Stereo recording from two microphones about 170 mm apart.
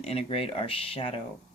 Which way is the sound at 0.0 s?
35° left (ahead or behind).